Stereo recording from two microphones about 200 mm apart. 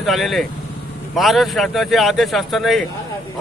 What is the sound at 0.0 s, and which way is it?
Speech, centre (ahead or behind).